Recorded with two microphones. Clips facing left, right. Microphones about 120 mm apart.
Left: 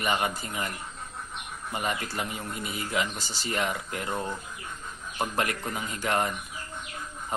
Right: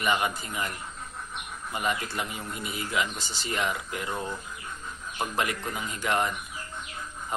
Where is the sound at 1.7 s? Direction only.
40° left (ahead or behind).